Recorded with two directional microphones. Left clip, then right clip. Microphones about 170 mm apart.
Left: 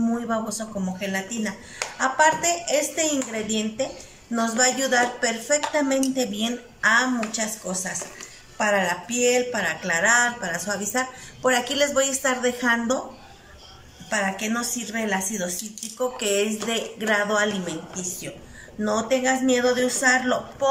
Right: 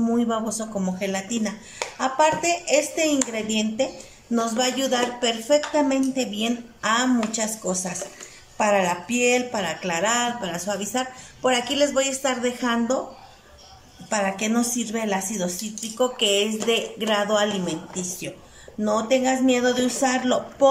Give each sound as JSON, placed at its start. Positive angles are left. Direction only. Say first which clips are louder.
{"t": 0.0, "sound": "speech", "louder": "right 2 dB", "side_deg": -15}
{"t": 14.1, "sound": "speech", "louder": "right 1 dB", "side_deg": -20}